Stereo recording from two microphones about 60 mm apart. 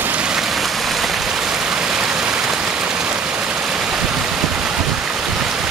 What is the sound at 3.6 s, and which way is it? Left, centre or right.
Stream, centre.